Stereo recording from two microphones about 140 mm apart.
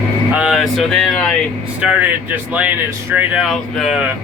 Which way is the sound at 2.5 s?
10° right (ahead or behind).